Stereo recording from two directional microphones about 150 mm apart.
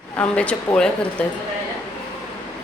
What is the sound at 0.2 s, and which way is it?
Speech, 10° left (ahead or behind).